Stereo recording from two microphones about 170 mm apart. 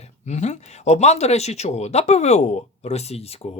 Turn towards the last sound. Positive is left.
turn(degrees=40)  # may be behind; listen again after turning